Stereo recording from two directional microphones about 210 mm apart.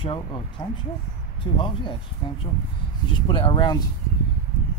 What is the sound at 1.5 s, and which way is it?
Speech, 25° left (ahead or behind).